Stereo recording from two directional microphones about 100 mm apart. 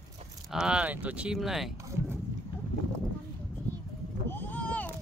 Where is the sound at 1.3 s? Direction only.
Centre (ahead or behind).